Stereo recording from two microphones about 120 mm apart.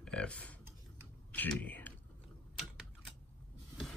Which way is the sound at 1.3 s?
10° left (ahead or behind).